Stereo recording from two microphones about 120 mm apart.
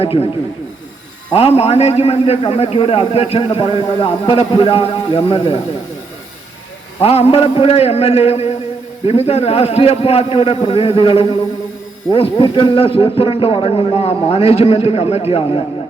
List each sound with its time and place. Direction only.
0.0 s a man's voice: 50° left (ahead or behind)
1.3 s a man's voice: 55° left (ahead or behind)
7.0 s a man's voice: 55° left (ahead or behind)